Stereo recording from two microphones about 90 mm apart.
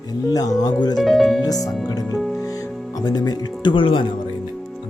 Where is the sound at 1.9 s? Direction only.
45° left (ahead or behind).